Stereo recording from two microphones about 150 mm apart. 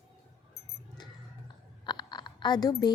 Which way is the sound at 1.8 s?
30° left (ahead or behind).